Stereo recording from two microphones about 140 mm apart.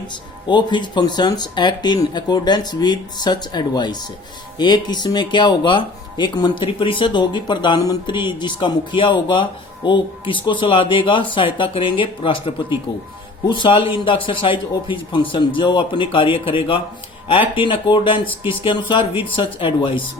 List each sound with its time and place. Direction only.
0.1 s speech: 35° left (ahead or behind)